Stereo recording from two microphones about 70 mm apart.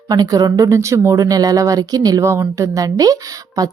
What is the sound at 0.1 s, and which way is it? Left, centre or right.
A woman's voice, right.